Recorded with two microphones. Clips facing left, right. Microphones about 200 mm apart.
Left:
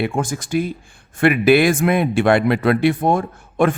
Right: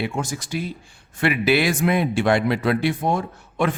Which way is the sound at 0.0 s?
50° left (ahead or behind).